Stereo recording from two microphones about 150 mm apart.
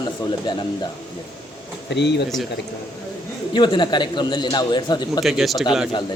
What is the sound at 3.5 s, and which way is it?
A man's voice, 30° left (ahead or behind).